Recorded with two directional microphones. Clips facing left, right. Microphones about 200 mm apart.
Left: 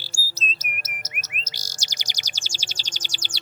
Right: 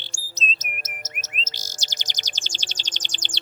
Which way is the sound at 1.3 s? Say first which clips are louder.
Right 2 dB; 10° left (ahead or behind).